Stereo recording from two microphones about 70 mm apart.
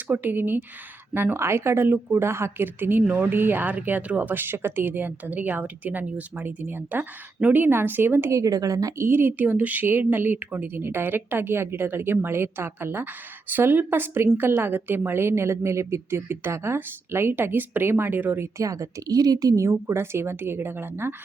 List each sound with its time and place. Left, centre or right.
0.1 s a woman's voice: right
8.3 s a woman's voice: right
9.0 s a woman's voice: right
18.5 s a woman's voice: right